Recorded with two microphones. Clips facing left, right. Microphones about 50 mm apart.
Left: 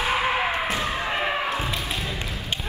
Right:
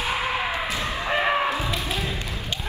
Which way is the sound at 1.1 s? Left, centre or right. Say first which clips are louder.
Right 7 dB; right.